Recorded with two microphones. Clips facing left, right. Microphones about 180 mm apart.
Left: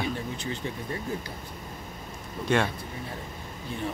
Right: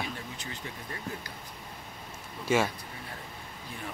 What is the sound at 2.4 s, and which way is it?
Speech, 5° right (ahead or behind).